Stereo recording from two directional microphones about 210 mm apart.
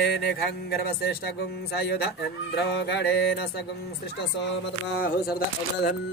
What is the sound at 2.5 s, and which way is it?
Music, 50° left (ahead or behind).